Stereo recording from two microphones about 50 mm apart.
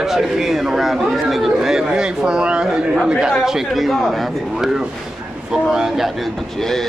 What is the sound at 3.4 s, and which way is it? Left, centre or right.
Speech, centre.